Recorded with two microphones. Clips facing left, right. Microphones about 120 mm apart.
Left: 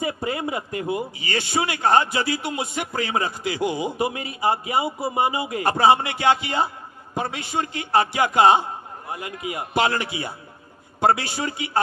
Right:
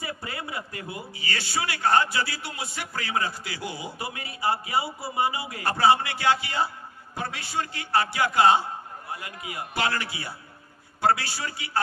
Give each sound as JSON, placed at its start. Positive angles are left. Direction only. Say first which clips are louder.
{"t": 0.0, "sound": "a man's voice", "louder": "left 9 dB", "side_deg": 20}